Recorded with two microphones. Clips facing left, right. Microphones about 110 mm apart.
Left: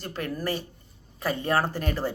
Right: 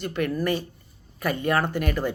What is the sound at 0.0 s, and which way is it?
A woman's voice, 35° left (ahead or behind).